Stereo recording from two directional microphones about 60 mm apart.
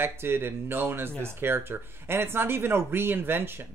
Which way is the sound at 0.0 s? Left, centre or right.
Right.